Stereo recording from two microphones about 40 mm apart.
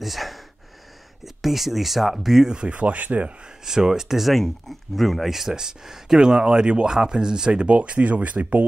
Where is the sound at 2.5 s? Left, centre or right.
Right.